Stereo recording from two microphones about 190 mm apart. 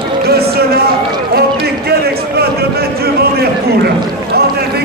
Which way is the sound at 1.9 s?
55° right (ahead or behind).